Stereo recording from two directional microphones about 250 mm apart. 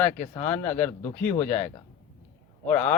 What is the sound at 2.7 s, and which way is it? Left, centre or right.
Speech, centre.